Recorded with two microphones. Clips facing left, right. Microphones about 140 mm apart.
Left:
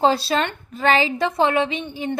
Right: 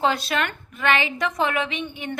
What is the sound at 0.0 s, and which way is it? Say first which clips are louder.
A woman's voice: left 4 dB; 35° left (ahead or behind).